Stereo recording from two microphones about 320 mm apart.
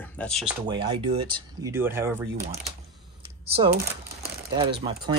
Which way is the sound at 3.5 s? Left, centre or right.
Right.